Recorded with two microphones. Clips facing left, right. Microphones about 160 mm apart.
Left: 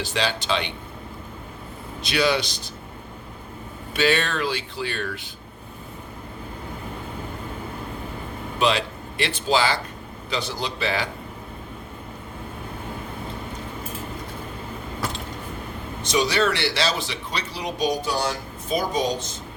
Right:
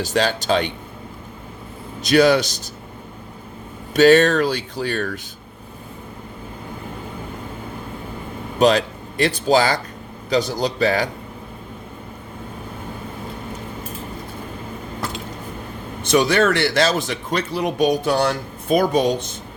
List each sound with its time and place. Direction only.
0.0 s speech: 45° right (ahead or behind)
2.0 s speech: 45° right (ahead or behind)
3.9 s speech: 45° right (ahead or behind)
8.5 s a man's voice: 40° right (ahead or behind)
16.0 s speech: 55° right (ahead or behind)